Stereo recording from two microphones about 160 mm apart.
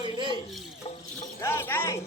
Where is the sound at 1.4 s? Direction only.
15° left (ahead or behind).